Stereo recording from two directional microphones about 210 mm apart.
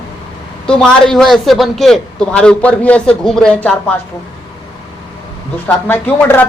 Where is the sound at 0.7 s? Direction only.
5° left (ahead or behind).